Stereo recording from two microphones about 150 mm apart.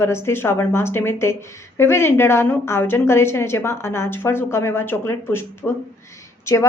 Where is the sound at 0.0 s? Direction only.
15° left (ahead or behind).